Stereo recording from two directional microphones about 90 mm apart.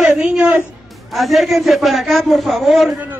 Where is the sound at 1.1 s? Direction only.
Centre (ahead or behind).